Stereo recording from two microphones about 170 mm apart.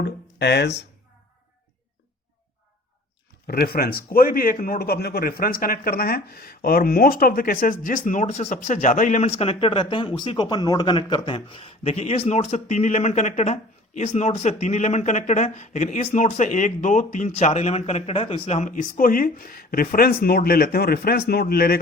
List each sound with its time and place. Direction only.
0.0 s speech: 85° left
3.4 s a man's voice: 65° left (ahead or behind)